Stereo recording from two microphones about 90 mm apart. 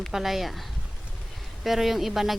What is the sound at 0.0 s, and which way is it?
Speech, 5° right (ahead or behind).